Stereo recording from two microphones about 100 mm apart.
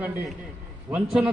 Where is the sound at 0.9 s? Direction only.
5° right (ahead or behind).